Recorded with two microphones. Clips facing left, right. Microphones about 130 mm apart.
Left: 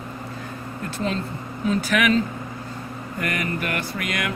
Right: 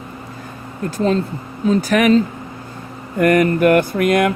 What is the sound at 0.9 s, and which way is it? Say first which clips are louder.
Speech: right 9 dB; 40° right (ahead or behind).